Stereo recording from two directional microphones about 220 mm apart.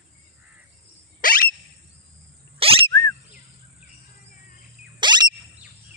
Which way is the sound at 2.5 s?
25° right (ahead or behind).